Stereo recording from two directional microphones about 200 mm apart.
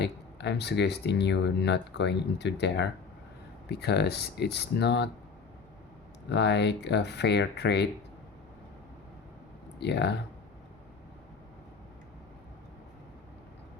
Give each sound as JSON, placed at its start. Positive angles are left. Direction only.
{"t": 0.0, "sound": "speech", "side_deg": 60}
{"t": 6.3, "sound": "speech", "side_deg": 60}
{"t": 9.8, "sound": "speech", "side_deg": 55}